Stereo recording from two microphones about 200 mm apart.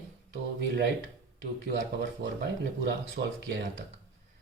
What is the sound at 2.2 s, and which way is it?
Speech, 60° right (ahead or behind).